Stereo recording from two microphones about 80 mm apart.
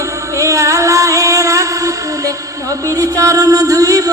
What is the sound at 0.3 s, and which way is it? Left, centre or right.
Music, right.